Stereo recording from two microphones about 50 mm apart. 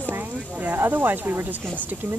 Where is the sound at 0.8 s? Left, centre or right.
Right.